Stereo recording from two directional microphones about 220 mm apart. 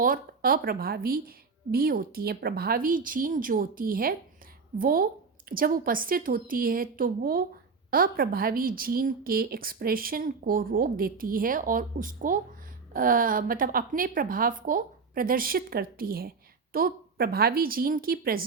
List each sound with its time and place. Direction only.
0.0 s a woman's voice: 40° right (ahead or behind)